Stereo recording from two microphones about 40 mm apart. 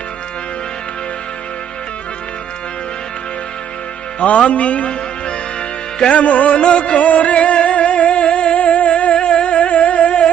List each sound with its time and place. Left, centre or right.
4.3 s speech: left
6.1 s music: left